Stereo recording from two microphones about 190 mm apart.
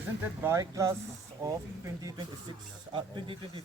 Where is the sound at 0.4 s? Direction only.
15° right (ahead or behind).